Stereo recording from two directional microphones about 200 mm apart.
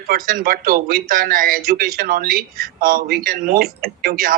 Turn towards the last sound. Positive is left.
turn(degrees=-45)  # may be behind; listen again after turning